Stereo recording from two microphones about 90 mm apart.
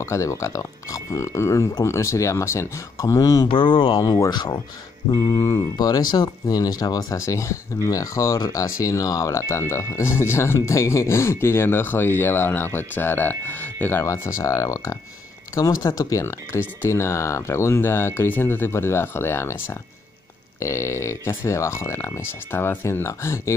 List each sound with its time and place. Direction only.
0.0 s speech: 35° left (ahead or behind)
3.4 s speech: 70° left (ahead or behind)
4.3 s speech: 50° left (ahead or behind)
5.1 s speech: 40° left (ahead or behind); by 14.0 s 20° left (ahead or behind)
14.0 s speech: 30° left (ahead or behind)